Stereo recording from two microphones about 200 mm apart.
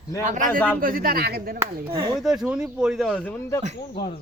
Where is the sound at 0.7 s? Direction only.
45° right (ahead or behind).